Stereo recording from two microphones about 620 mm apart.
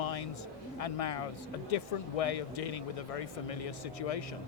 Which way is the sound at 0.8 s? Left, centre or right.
Left.